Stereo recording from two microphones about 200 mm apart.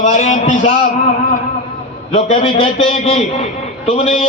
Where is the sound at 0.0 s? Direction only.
35° left (ahead or behind).